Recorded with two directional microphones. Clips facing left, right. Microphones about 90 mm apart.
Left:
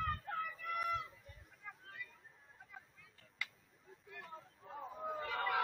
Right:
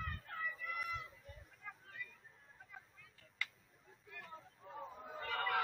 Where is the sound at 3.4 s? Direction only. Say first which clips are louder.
Right 1 dB; 15° left (ahead or behind).